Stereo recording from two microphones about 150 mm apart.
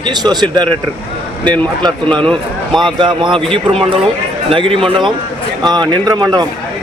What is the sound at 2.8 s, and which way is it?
Speech, 30° right (ahead or behind).